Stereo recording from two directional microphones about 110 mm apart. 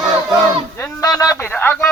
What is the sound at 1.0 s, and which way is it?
Speech, 30° left (ahead or behind).